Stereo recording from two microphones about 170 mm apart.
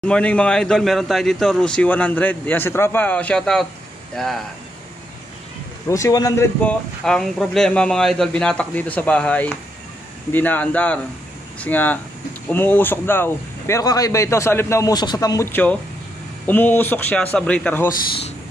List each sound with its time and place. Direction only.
0.0 s speech: 5° left (ahead or behind)
5.9 s speech: 20° left (ahead or behind)